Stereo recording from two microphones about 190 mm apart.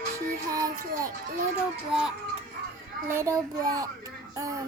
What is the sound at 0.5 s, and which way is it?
Child singing, 20° right (ahead or behind).